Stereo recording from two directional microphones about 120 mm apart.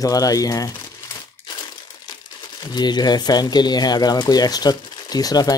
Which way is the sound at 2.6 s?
35° left (ahead or behind).